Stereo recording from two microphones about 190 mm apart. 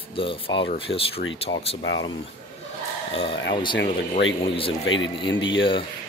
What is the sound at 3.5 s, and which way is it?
Speech, 25° left (ahead or behind).